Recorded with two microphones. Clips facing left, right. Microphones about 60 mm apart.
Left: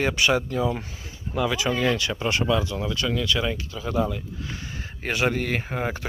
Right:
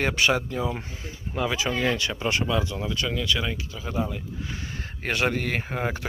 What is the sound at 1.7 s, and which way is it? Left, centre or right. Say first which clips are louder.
Speech: left 2 dB; centre.